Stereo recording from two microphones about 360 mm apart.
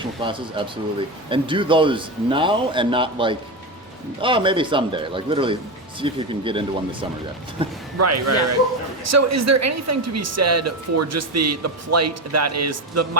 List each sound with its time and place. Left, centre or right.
0.0 s speech: centre
7.9 s a woman's voice: right